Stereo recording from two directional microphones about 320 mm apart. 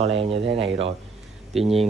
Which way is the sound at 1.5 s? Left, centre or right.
Centre.